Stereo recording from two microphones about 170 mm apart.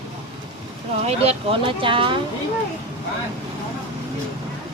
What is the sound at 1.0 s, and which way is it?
Speech, 35° right (ahead or behind).